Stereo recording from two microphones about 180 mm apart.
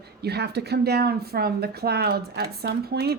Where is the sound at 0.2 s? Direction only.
65° right (ahead or behind).